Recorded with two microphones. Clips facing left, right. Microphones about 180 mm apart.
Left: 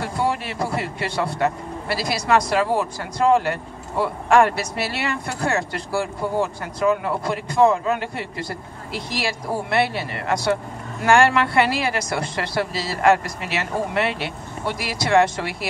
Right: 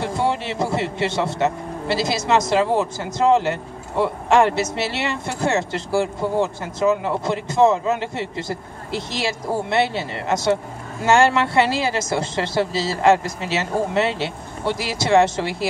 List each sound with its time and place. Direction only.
0.0 s a man's voice: 25° right (ahead or behind)